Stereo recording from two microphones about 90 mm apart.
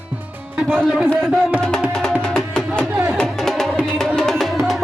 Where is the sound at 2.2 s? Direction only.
10° left (ahead or behind).